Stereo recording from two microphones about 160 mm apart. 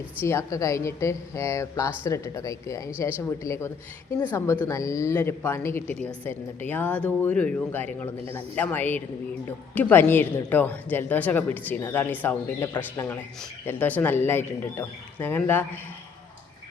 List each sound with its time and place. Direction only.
0.2 s speech: 15° left (ahead or behind)